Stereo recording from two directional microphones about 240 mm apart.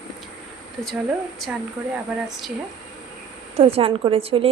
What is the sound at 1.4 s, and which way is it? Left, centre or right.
Speech, centre.